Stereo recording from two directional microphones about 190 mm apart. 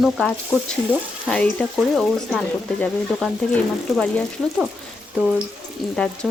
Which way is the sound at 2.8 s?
5° left (ahead or behind).